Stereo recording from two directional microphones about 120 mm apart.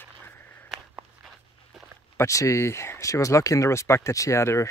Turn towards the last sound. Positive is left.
turn(degrees=25)  # may be behind; listen again after turning